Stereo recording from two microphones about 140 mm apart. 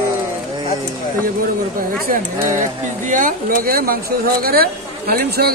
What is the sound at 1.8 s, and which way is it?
Speech, 85° right.